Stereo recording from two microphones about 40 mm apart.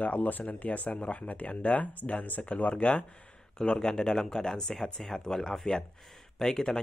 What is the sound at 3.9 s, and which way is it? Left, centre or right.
Speech, centre.